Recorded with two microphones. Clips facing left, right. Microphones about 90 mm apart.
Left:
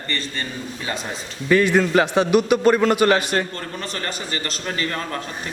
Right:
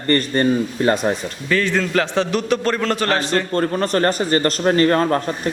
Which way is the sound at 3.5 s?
45° right (ahead or behind).